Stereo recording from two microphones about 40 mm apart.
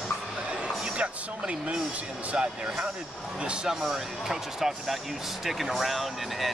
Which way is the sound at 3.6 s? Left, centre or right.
Centre.